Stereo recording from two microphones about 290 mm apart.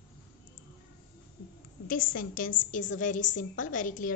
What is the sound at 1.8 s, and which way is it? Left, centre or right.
A woman's voice, left.